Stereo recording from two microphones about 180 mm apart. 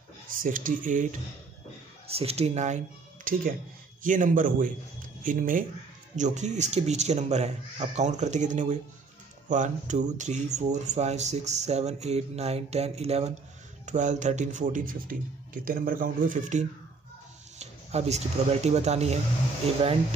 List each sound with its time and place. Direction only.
0.4 s speech: 50° right (ahead or behind)
2.0 s speech: 35° right (ahead or behind)